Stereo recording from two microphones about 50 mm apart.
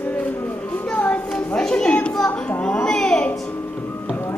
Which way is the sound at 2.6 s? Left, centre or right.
Left.